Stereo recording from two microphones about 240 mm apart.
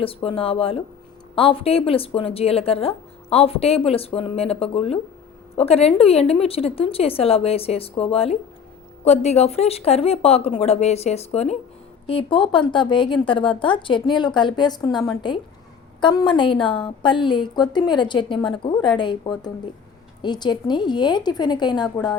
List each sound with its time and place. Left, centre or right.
0.0 s a woman's voice: left